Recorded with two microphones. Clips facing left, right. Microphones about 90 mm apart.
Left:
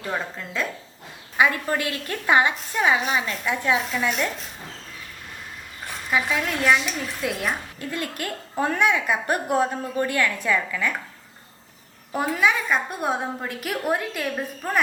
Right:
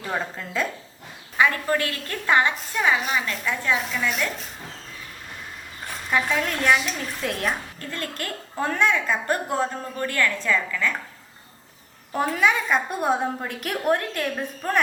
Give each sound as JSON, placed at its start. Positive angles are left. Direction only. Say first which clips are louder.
{"t": 0.0, "sound": "a woman's voice", "louder": "even", "side_deg": 0}
{"t": 1.4, "sound": "a woman's voice", "louder": "even", "side_deg": 15}
{"t": 3.4, "sound": "a woman's voice", "louder": "left 3 dB", "side_deg": 15}
{"t": 3.8, "sound": "a woman's voice", "louder": "left 2 dB", "side_deg": 0}
{"t": 6.1, "sound": "a woman's voice", "louder": "even", "side_deg": 5}
{"t": 12.1, "sound": "a woman's voice", "louder": "even", "side_deg": 5}